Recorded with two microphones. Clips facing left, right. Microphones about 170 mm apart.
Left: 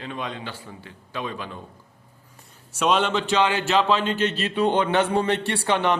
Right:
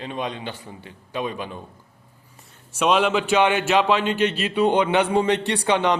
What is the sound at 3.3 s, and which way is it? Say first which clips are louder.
Speech: right 2 dB; 20° right (ahead or behind).